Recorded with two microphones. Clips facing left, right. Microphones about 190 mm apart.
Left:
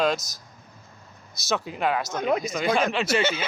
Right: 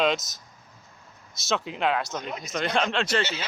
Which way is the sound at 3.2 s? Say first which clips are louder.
Left 5 dB; 55° left (ahead or behind).